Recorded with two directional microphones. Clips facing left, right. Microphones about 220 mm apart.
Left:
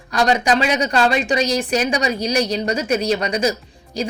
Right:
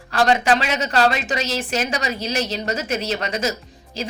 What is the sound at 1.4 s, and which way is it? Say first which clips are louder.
A woman's voice: left 5 dB; 15° left (ahead or behind).